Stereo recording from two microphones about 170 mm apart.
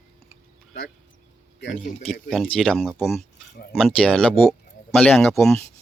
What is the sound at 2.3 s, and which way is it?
Speech, 5° left (ahead or behind).